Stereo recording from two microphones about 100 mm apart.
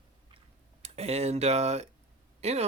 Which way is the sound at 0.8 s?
90° right.